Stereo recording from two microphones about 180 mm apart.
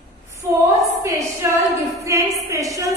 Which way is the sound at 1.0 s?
20° right (ahead or behind).